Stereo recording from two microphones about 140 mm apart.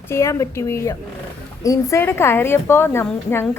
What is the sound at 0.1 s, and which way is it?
A woman's voice, 20° left (ahead or behind).